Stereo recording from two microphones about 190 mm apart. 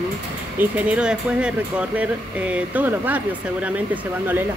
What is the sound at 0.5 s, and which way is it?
Speech, 5° right (ahead or behind).